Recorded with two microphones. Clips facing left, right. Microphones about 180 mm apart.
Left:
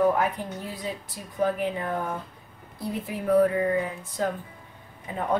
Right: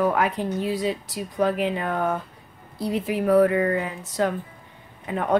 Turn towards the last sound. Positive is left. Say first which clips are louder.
# right 5 dB
turn(degrees=-75)  # may be behind; listen again after turning